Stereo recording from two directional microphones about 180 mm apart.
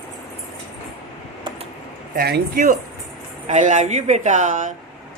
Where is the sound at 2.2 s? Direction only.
60° right (ahead or behind).